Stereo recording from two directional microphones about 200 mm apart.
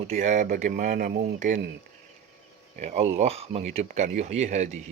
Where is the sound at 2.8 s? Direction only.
35° right (ahead or behind).